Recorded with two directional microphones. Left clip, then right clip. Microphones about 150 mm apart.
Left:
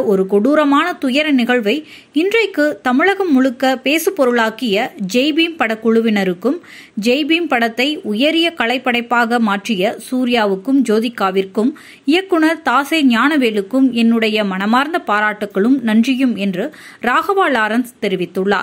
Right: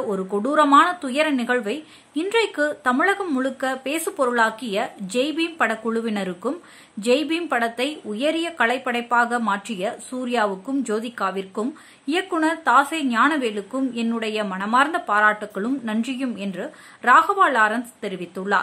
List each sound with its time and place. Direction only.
0.1 s a woman's voice: 15° left (ahead or behind)